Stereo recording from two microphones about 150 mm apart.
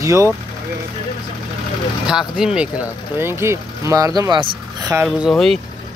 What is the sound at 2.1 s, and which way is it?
Speech, 5° right (ahead or behind).